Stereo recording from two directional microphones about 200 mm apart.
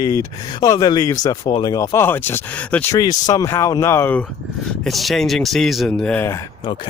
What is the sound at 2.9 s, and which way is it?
Speech, 20° left (ahead or behind).